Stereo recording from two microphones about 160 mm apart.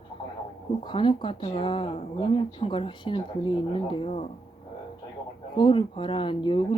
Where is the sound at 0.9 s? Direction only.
30° left (ahead or behind).